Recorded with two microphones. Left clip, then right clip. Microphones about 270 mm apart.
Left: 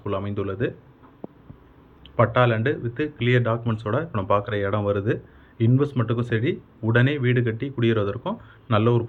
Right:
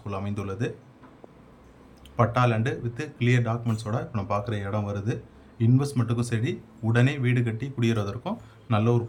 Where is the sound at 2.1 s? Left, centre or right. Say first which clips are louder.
Left 4 dB; centre.